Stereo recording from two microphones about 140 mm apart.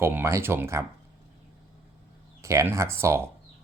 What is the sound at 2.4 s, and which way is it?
Speech, 20° right (ahead or behind).